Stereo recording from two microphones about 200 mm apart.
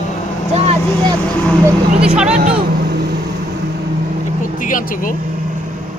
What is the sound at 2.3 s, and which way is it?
Speech, 35° right (ahead or behind).